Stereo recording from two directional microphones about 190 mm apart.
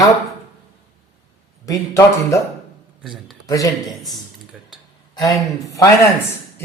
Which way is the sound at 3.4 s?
20° left (ahead or behind).